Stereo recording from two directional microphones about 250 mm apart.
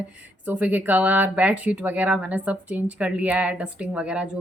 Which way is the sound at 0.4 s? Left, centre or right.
Centre.